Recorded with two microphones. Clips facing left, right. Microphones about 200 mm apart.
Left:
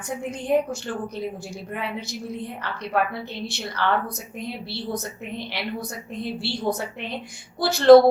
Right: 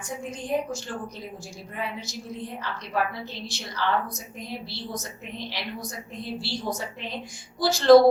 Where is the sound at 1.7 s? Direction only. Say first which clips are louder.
Left 2 dB; 65° left (ahead or behind).